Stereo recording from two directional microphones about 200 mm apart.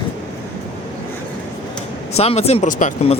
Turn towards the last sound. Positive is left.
turn(degrees=35)  # may be behind; listen again after turning